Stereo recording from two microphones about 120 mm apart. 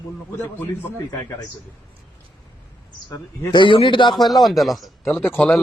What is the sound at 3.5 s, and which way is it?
Speech, 45° left (ahead or behind).